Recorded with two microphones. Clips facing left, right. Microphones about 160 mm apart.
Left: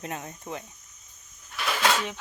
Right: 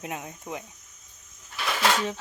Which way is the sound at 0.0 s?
10° right (ahead or behind).